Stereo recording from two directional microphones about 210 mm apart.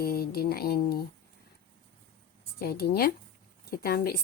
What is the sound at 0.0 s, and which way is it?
Speech, 45° left (ahead or behind).